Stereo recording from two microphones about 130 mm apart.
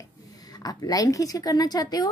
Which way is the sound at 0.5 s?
30° left (ahead or behind).